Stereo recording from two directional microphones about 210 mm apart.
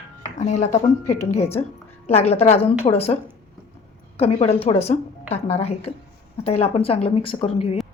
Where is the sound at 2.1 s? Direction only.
30° left (ahead or behind).